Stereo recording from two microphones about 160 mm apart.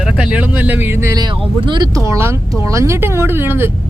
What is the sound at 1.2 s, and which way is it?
Speech, 30° right (ahead or behind).